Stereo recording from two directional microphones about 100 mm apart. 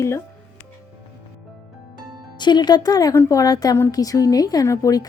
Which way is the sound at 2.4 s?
45° left (ahead or behind).